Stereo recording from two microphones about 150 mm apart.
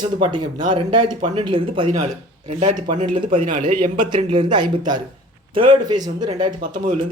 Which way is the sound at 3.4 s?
60° right (ahead or behind).